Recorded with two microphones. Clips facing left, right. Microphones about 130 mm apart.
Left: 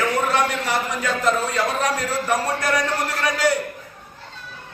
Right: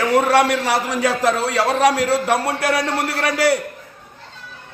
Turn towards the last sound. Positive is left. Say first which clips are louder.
# right 3 dB
turn(degrees=-70)  # may be behind; listen again after turning